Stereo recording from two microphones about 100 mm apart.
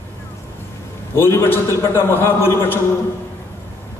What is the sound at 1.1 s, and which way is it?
A man's voice, 25° left (ahead or behind).